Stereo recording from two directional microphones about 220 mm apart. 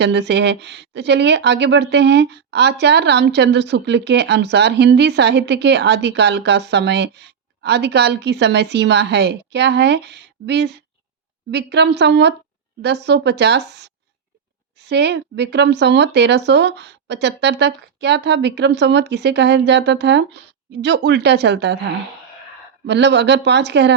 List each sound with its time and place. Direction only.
0.0 s speech: 50° right (ahead or behind)
22.9 s speech: 50° right (ahead or behind)